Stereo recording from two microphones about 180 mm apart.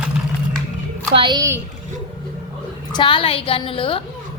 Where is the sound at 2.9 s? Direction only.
25° left (ahead or behind).